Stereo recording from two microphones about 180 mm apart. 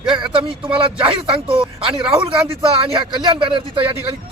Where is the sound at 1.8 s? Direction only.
30° right (ahead or behind).